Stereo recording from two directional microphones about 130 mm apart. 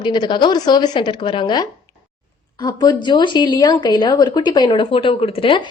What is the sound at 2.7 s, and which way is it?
A woman's voice, 35° left (ahead or behind).